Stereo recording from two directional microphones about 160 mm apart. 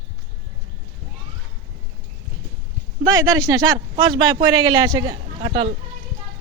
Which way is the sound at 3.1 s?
25° right (ahead or behind).